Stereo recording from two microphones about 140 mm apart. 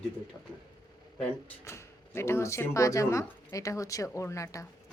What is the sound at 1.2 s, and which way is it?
Speech, 15° left (ahead or behind).